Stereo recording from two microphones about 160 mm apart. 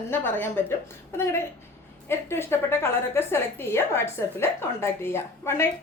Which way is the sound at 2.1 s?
15° left (ahead or behind).